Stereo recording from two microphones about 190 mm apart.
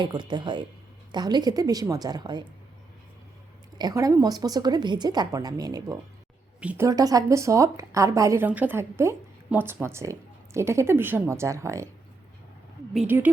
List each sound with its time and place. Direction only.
0.0 s speech: 25° right (ahead or behind)
3.8 s speech: 20° right (ahead or behind)
6.6 s speech: 5° right (ahead or behind)
6.8 s speech: 20° right (ahead or behind)
12.9 s speech: 5° right (ahead or behind)